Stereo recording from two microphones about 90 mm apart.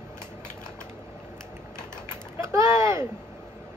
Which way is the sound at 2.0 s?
30° right (ahead or behind).